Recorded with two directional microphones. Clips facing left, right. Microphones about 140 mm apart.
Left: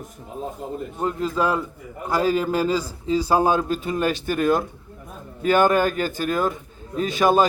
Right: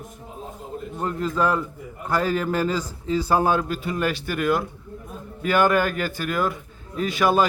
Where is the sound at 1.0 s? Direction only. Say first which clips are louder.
Left 1 dB; 15° left (ahead or behind).